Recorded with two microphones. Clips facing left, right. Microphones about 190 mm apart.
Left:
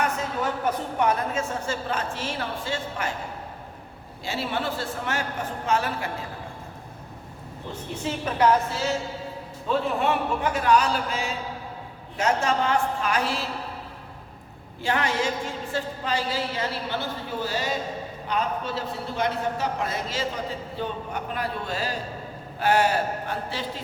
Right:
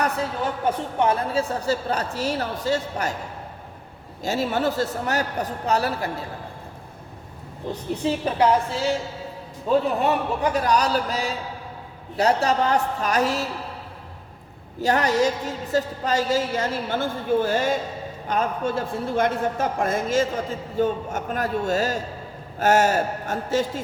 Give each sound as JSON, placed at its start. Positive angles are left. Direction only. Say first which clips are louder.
{"t": 0.9, "sound": "speech", "louder": "right 3 dB", "side_deg": -30}
{"t": 4.2, "sound": "speech", "louder": "right 6 dB", "side_deg": -40}
{"t": 7.7, "sound": "speech", "louder": "right 6 dB", "side_deg": -35}
{"t": 9.6, "sound": "speech", "louder": "right 4 dB", "side_deg": -40}
{"t": 14.8, "sound": "a man's voice", "louder": "right 5 dB", "side_deg": -40}